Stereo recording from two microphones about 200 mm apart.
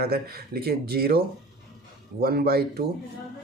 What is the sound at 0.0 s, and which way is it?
Speech, 50° right (ahead or behind).